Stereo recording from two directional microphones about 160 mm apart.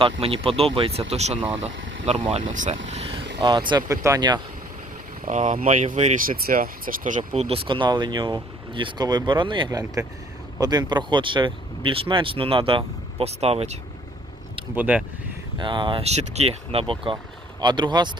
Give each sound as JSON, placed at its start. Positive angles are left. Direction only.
{"t": 0.0, "sound": "speech", "side_deg": -35}
{"t": 5.2, "sound": "speech", "side_deg": -50}
{"t": 6.2, "sound": "speech", "side_deg": -65}
{"t": 7.2, "sound": "speech", "side_deg": -40}
{"t": 14.8, "sound": "speech", "side_deg": -10}
{"t": 15.5, "sound": "speech", "side_deg": -30}